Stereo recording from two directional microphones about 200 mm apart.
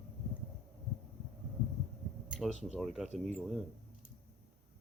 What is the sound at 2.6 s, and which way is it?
Speech, centre (ahead or behind).